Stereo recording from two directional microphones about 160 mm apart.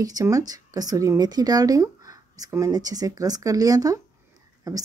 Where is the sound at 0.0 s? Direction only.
20° right (ahead or behind).